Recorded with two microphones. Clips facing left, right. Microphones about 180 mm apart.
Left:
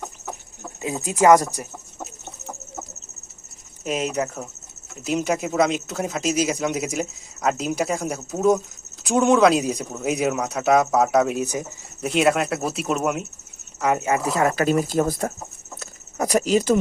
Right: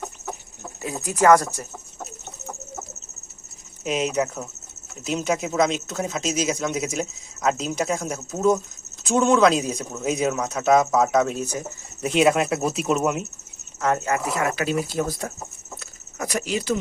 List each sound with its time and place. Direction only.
0.8 s speech: 20° left (ahead or behind)
3.8 s speech: centre (ahead or behind)
12.0 s speech: centre (ahead or behind)
13.8 s speech: 10° left (ahead or behind)
14.1 s speech: 35° left (ahead or behind); by 15.3 s 50° left (ahead or behind)
15.8 s speech: 40° left (ahead or behind)